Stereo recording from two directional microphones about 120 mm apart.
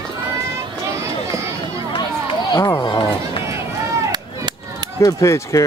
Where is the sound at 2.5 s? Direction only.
25° left (ahead or behind).